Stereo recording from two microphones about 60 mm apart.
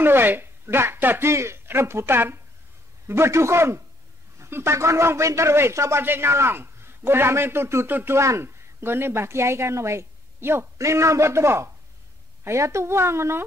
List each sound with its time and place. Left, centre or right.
0.0 s speech: right
1.3 s a woman's voice: right
6.0 s a man's voice: right
8.2 s speech: right
8.8 s a woman's voice: right
10.8 s a woman's voice: right